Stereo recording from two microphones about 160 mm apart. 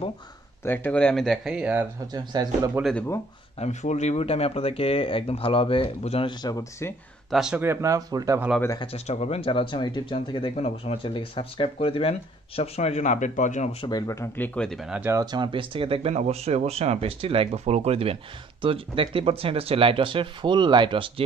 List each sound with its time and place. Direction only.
0.7 s speech: 10° left (ahead or behind); by 1.9 s 10° right (ahead or behind)
2.1 s speech: 25° right (ahead or behind)
2.8 s speech: 5° left (ahead or behind)
3.5 s speech: 45° left (ahead or behind)
6.4 s speech: 20° left (ahead or behind)
7.2 s speech: 5° right (ahead or behind)
7.6 s speech: 15° right (ahead or behind)
8.7 s speech: 40° left (ahead or behind)
13.8 s speech: 20° left (ahead or behind); by 15.1 s 5° right (ahead or behind)
15.1 s speech: 30° right (ahead or behind)